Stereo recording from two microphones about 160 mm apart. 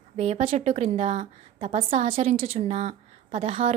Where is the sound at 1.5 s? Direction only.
35° right (ahead or behind).